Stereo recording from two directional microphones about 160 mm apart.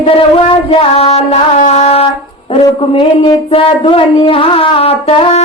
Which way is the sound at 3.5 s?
35° left (ahead or behind).